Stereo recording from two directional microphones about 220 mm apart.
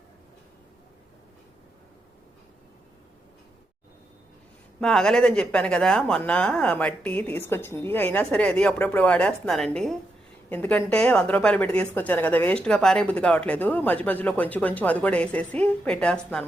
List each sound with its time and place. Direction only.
4.8 s a woman's voice: 5° left (ahead or behind)